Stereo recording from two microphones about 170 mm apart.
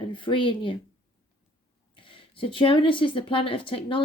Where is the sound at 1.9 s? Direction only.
30° left (ahead or behind).